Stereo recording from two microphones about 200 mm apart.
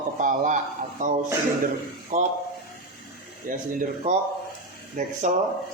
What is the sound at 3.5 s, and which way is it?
A man's voice, 40° right (ahead or behind).